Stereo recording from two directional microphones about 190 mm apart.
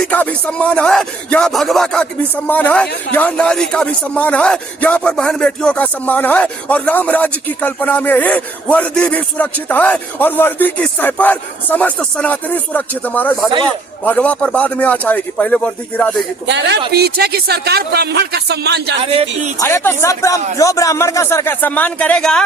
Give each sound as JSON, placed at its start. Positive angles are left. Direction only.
{"t": 0.1, "sound": "speech", "side_deg": 5}
{"t": 16.5, "sound": "speech", "side_deg": -65}
{"t": 19.0, "sound": "speech", "side_deg": -30}
{"t": 19.5, "sound": "speech", "side_deg": 15}